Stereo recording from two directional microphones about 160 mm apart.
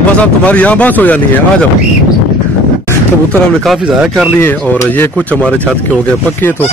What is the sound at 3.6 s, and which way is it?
Speech, centre (ahead or behind).